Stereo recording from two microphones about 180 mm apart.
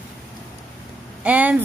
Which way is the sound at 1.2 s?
10° right (ahead or behind).